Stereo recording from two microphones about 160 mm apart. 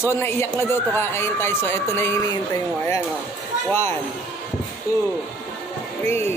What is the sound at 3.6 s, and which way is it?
Speech, 15° left (ahead or behind).